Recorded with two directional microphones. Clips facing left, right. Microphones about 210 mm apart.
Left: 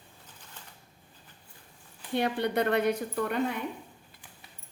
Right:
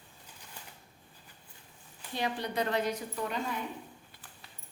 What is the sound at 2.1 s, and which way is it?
A woman's voice, 60° left (ahead or behind).